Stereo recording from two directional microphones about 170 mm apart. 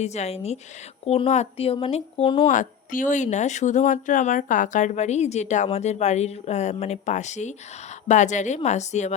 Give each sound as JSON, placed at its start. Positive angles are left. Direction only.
{"t": 0.0, "sound": "speech", "side_deg": 40}
{"t": 2.5, "sound": "speech", "side_deg": 50}